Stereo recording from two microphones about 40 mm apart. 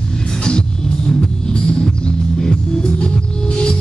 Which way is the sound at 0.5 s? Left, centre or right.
Left.